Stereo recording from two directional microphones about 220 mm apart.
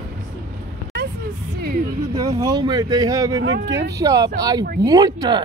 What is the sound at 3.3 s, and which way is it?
Speech, 55° right (ahead or behind).